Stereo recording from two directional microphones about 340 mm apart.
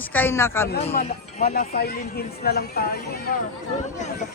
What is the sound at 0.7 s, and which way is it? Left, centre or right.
Speech, left.